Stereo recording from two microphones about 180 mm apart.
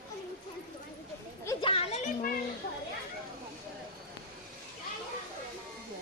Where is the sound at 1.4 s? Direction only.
25° left (ahead or behind).